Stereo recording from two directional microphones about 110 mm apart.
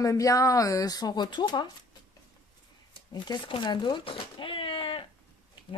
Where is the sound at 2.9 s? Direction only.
45° left (ahead or behind).